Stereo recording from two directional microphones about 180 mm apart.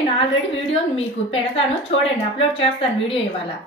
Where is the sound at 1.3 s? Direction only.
35° left (ahead or behind).